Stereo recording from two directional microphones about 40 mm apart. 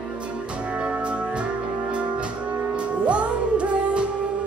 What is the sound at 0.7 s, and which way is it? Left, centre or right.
Music, right.